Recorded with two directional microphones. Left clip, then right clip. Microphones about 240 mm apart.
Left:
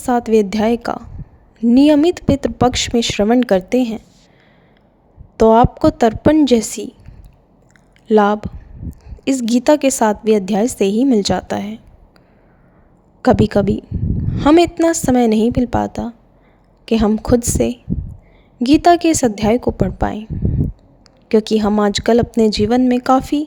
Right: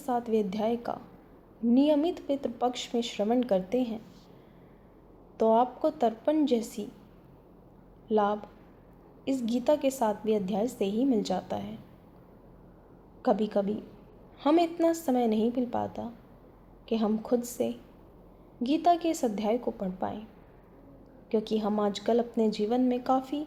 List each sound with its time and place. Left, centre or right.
0.0 s a woman's voice: left
5.4 s a woman's voice: left
8.0 s a woman's voice: left
13.2 s a woman's voice: left
21.2 s a woman's voice: left